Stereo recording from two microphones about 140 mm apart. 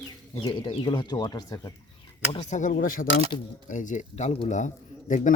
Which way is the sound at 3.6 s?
65° left (ahead or behind).